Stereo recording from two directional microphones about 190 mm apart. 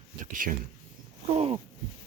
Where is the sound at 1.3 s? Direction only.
30° right (ahead or behind).